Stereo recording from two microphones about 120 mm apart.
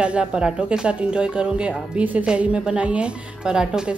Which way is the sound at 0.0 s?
10° right (ahead or behind).